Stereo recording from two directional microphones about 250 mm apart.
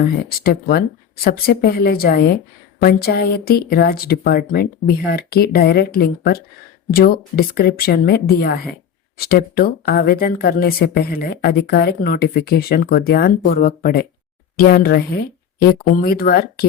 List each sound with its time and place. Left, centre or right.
0.0 s speech: left